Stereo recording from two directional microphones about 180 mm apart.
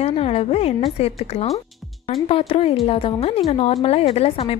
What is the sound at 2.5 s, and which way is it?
A woman's voice, 30° left (ahead or behind).